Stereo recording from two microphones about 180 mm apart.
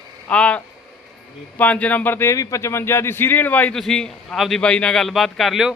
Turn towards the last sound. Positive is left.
turn(degrees=0)  # may be behind; listen again after turning